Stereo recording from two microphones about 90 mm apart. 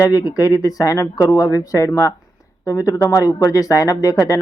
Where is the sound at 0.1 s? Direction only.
45° left (ahead or behind).